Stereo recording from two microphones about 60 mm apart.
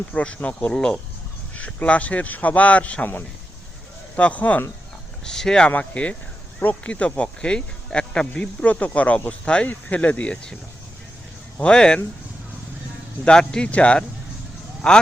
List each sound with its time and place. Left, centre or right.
0.1 s speech: centre
0.7 s speech: centre
1.5 s speech: left
5.2 s speech: centre
11.6 s speech: centre
13.2 s speech: centre